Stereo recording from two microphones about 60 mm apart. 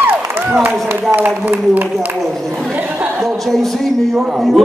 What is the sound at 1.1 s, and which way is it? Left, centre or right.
Speech, right.